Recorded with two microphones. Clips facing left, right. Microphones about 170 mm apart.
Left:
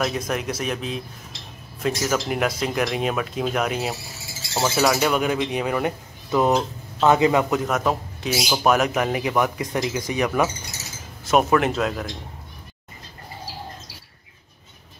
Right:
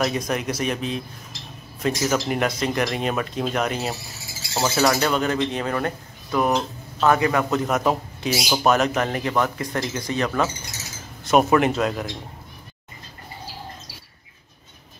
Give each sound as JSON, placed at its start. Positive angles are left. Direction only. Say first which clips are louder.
{"t": 0.0, "sound": "speech", "louder": "right 1 dB", "side_deg": 0}
{"t": 7.5, "sound": "speech", "louder": "right 1 dB", "side_deg": 0}
{"t": 11.2, "sound": "speech", "louder": "right 1 dB", "side_deg": 0}